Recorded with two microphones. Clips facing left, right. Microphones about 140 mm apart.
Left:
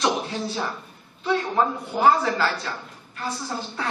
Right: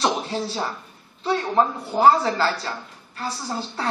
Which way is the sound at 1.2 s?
35° right (ahead or behind).